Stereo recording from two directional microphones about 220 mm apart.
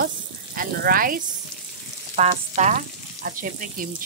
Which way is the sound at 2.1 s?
30° right (ahead or behind).